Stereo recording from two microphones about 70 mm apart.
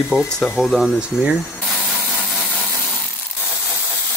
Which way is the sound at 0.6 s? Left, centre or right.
Centre.